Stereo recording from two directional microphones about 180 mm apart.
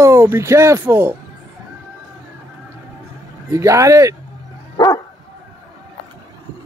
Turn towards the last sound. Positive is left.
turn(degrees=20)  # may be behind; listen again after turning